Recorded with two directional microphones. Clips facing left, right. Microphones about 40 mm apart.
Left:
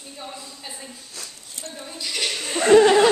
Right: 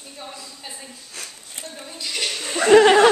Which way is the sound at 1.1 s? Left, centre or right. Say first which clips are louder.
Right 2 dB; right.